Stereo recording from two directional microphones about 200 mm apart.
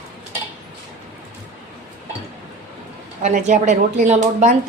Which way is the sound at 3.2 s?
35° right (ahead or behind).